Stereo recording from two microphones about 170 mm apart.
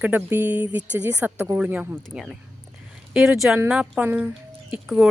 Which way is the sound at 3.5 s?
10° right (ahead or behind).